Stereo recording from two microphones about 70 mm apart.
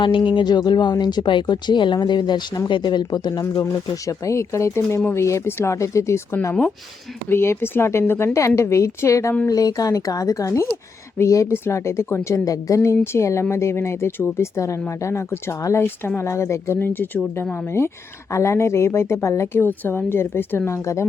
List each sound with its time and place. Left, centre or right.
0.2 s speech: left
3.4 s speech: left
7.3 s speech: left
8.3 s speech: left
9.5 s speech: left
12.5 s speech: left
19.5 s speech: left
20.7 s speech: left